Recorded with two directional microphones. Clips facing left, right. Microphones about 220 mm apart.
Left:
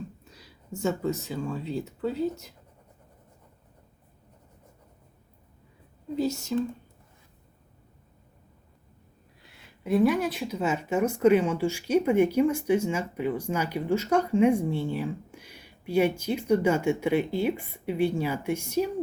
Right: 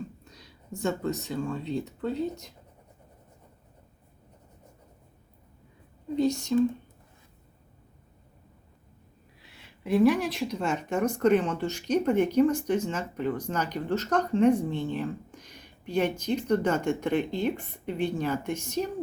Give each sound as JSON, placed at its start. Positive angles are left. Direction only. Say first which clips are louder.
{"t": 0.3, "sound": "speech", "louder": "left 1 dB", "side_deg": 5}
{"t": 6.1, "sound": "speech", "louder": "right 3 dB", "side_deg": 5}
{"t": 9.4, "sound": "speech", "louder": "left 1 dB", "side_deg": 0}